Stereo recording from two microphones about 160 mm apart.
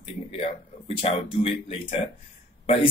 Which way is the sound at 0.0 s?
35° left (ahead or behind).